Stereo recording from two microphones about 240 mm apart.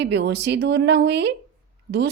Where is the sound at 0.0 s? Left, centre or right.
Right.